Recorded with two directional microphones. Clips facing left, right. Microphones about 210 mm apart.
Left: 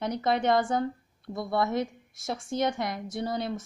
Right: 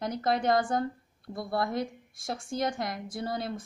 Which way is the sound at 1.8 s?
Centre (ahead or behind).